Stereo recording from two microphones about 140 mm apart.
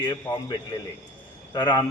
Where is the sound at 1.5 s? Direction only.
30° left (ahead or behind).